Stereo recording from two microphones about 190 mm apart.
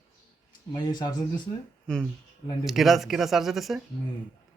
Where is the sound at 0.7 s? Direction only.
20° left (ahead or behind).